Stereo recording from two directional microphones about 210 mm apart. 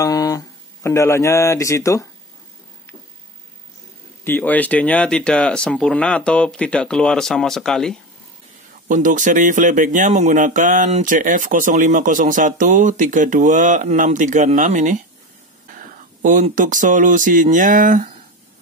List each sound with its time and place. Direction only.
0.0 s a sound: 15° left (ahead or behind)
0.8 s a man's voice: 15° left (ahead or behind)
4.2 s speech: 10° left (ahead or behind)
8.8 s speech: 40° right (ahead or behind)